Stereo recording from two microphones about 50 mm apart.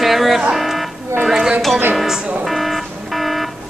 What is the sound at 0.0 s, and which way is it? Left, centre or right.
Music, centre.